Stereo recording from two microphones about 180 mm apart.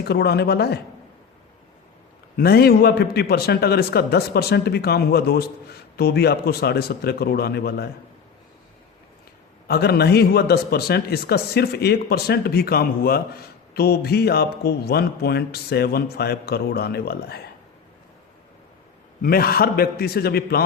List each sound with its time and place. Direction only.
0.0 s a man's voice: 65° left (ahead or behind)
2.3 s a man's voice: 60° left (ahead or behind)
9.6 s a man's voice: 60° left (ahead or behind)
19.2 s a man's voice: 55° left (ahead or behind)